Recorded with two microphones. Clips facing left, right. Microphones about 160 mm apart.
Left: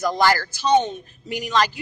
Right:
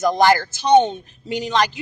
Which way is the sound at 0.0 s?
20° right (ahead or behind).